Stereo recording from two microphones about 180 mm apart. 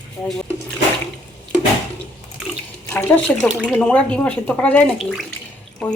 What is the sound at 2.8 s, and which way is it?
Speech, 10° left (ahead or behind).